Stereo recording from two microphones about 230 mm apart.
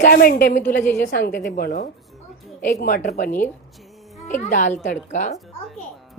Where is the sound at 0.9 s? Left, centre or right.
Left.